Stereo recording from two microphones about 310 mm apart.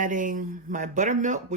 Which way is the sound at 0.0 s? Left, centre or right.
Right.